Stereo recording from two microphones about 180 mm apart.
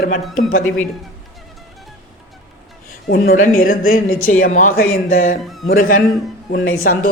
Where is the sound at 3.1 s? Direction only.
55° left (ahead or behind).